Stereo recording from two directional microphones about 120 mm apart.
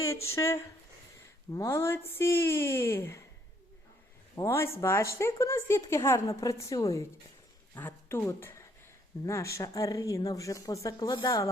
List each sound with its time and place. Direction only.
0.0 s a woman's voice: 25° left (ahead or behind)
4.4 s a woman's voice: 20° left (ahead or behind)
7.8 s a woman's voice: 15° left (ahead or behind); by 11.5 s 30° left (ahead or behind)